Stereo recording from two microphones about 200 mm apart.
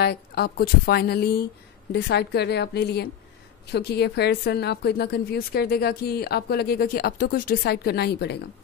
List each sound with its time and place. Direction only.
0.0 s a woman's voice: 55° left (ahead or behind)